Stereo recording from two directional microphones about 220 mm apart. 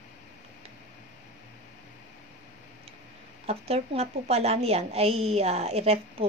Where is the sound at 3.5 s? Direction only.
25° right (ahead or behind).